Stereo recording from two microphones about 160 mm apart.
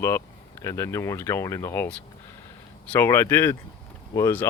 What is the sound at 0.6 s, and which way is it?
Speech, 20° left (ahead or behind).